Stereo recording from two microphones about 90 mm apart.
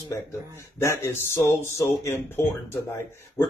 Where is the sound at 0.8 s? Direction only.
30° left (ahead or behind).